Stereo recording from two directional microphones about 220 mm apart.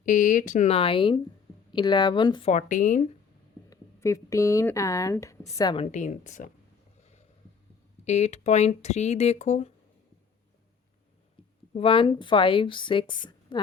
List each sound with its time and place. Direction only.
0.0 s a woman's voice: 35° left (ahead or behind); by 2.5 s 20° left (ahead or behind)
2.5 s speech: 35° left (ahead or behind)
3.7 s speech: 15° left (ahead or behind); by 6.5 s 35° left (ahead or behind)
7.0 s a sound: 30° left (ahead or behind)
8.0 s speech: 30° left (ahead or behind)
11.7 s a woman's voice: 25° left (ahead or behind)